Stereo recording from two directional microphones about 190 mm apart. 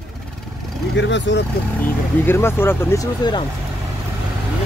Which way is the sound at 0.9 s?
70° left (ahead or behind).